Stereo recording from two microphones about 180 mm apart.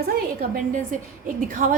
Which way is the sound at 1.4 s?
45° right (ahead or behind).